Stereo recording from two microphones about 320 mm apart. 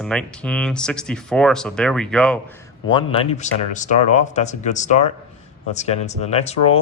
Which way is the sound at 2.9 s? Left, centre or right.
Centre.